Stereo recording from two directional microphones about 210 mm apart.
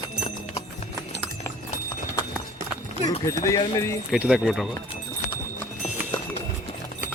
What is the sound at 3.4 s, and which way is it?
Speech, 15° left (ahead or behind).